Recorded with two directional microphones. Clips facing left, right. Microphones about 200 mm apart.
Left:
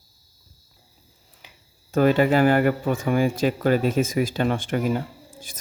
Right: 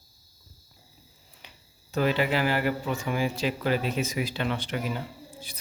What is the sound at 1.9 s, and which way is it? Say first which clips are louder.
Speech: left 7 dB; 50° left (ahead or behind).